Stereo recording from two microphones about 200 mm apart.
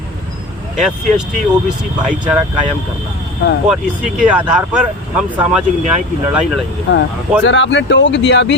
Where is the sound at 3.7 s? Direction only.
5° right (ahead or behind).